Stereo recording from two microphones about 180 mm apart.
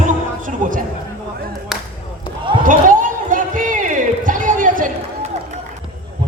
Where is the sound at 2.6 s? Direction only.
50° right (ahead or behind).